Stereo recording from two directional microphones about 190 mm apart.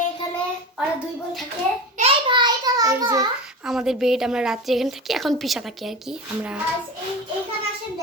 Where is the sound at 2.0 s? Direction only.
25° right (ahead or behind).